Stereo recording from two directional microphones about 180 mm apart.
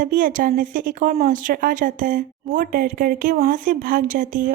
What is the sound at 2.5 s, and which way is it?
Speech, 60° right (ahead or behind).